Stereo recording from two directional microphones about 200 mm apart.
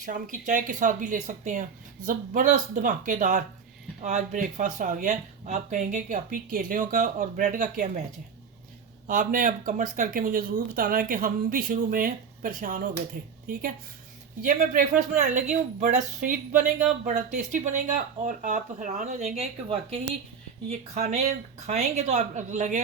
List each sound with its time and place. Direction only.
0.0 s speech: 40° right (ahead or behind)
9.0 s speech: 45° right (ahead or behind)